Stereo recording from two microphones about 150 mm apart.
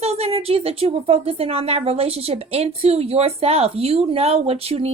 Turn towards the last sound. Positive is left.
turn(degrees=-40)  # may be behind; listen again after turning